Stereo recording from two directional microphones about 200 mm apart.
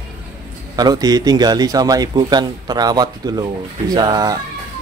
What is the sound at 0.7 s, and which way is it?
A man's voice, 20° right (ahead or behind).